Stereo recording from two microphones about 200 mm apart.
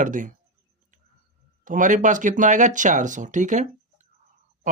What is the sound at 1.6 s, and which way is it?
Speech, 40° right (ahead or behind).